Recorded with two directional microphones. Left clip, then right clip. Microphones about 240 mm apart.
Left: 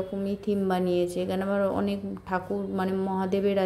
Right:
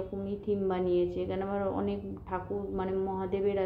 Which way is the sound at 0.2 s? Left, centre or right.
Left.